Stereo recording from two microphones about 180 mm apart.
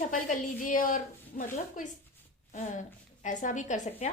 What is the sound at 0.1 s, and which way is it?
A woman's voice, 45° left (ahead or behind).